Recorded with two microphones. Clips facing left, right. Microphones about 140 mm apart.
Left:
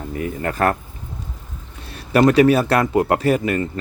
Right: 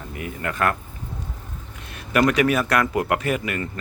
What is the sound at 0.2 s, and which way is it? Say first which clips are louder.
Speech: left 4 dB; 35° left (ahead or behind).